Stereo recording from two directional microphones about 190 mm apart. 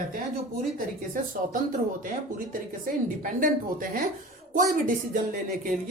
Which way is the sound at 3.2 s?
45° right (ahead or behind).